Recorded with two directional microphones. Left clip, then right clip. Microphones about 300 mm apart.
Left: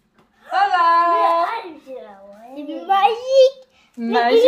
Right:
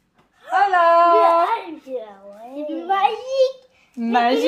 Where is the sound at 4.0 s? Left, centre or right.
Right.